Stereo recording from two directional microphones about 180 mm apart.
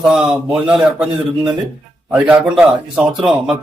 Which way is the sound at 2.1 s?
5° right (ahead or behind).